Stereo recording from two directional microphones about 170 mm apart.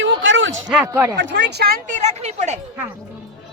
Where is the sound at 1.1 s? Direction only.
90° right; by 1.8 s 65° right (ahead or behind).